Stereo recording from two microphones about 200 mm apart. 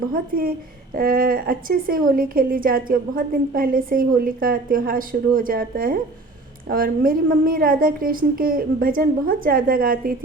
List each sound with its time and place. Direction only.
0.1 s a woman's voice: 45° right (ahead or behind)